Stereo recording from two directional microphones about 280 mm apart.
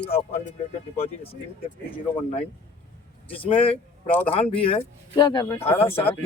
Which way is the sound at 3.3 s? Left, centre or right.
Centre.